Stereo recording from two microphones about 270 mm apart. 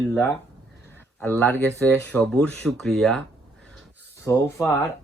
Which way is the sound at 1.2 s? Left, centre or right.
Centre.